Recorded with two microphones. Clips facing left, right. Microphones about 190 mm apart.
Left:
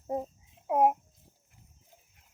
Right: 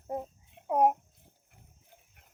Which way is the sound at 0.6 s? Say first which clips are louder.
Left 1 dB; 5° left (ahead or behind).